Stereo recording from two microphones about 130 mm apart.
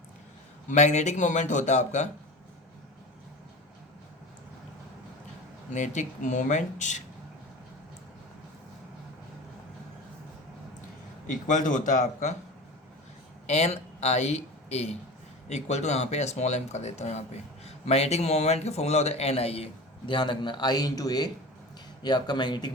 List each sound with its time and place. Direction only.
0.7 s a man's voice: 65° left (ahead or behind)
5.7 s a man's voice: 65° left (ahead or behind)
11.3 s a man's voice: 75° left (ahead or behind)
13.5 s speech: 55° left (ahead or behind)
20.1 s a man's voice: 35° left (ahead or behind)